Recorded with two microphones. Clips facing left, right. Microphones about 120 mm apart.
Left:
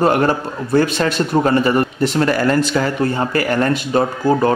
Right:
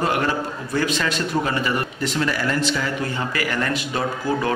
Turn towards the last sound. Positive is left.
turn(degrees=40)  # may be behind; listen again after turning